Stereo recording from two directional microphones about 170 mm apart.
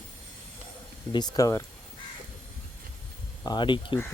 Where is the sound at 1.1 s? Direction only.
25° left (ahead or behind).